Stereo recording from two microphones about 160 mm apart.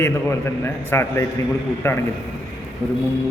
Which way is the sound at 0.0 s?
15° left (ahead or behind).